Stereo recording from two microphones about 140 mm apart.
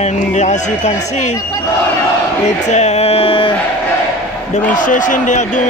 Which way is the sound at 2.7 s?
50° left (ahead or behind).